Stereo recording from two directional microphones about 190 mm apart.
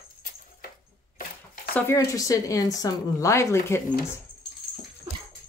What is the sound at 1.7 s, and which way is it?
Speech, 10° left (ahead or behind).